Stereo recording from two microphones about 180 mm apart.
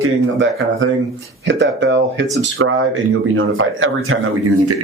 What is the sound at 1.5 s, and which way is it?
A man's voice, 80° right.